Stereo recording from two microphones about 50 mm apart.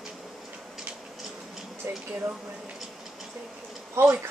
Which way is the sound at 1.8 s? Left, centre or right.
Right.